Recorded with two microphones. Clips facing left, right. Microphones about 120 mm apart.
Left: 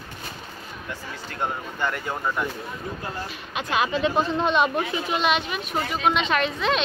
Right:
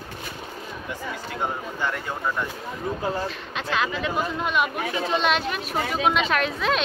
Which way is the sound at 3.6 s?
15° left (ahead or behind).